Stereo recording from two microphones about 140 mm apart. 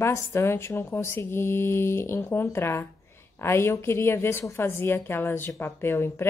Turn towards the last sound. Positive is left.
turn(degrees=15)  # may be behind; listen again after turning